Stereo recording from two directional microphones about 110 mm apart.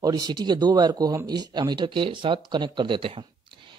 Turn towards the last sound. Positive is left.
turn(degrees=-50)  # may be behind; listen again after turning